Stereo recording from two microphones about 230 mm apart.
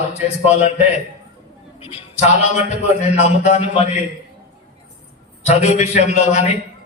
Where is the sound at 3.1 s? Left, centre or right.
Left.